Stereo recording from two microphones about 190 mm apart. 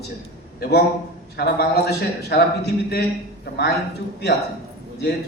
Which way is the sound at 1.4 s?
55° left (ahead or behind).